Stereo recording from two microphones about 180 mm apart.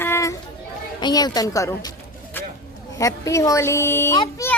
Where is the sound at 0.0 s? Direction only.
15° left (ahead or behind).